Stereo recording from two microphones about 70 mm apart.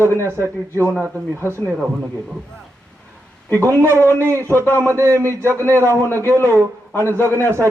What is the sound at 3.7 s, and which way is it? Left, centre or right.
Speech, right.